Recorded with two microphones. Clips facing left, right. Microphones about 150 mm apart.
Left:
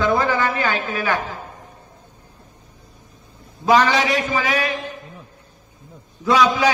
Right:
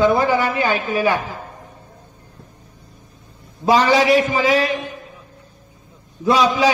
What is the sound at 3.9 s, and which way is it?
Speech, 15° right (ahead or behind).